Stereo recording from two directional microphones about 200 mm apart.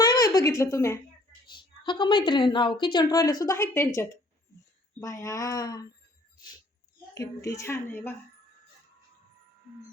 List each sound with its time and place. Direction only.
0.0 s a sound: 20° left (ahead or behind)
1.5 s a woman's voice: 25° left (ahead or behind)
7.1 s a woman's voice: 15° left (ahead or behind)